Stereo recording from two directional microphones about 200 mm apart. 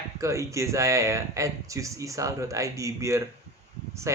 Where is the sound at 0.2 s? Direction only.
15° right (ahead or behind).